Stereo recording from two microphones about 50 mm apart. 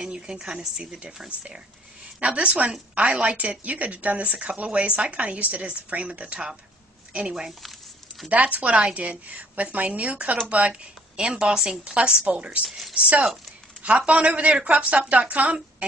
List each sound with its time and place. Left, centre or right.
0.0 s speech: centre
2.1 s a woman's voice: right
8.3 s a woman's voice: right
12.6 s speech: centre
12.9 s a woman's voice: right